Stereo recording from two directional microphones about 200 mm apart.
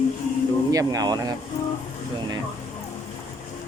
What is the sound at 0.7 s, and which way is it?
Speech, 15° right (ahead or behind).